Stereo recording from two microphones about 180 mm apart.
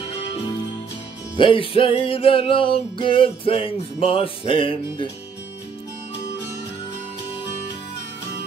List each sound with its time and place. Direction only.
1.3 s music: 30° left (ahead or behind)